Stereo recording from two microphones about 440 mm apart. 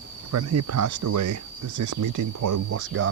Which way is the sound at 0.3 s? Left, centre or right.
Right.